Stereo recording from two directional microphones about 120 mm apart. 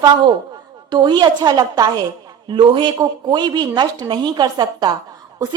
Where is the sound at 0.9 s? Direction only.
40° right (ahead or behind).